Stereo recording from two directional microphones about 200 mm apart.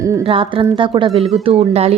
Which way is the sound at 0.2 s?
25° right (ahead or behind).